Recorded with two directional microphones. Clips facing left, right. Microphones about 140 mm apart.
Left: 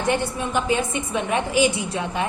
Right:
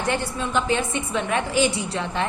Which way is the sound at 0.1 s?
15° left (ahead or behind).